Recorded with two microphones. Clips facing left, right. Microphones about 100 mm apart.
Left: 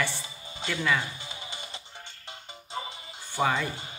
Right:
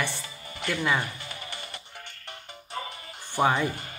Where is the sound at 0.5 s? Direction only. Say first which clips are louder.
Right 2 dB; 20° left (ahead or behind).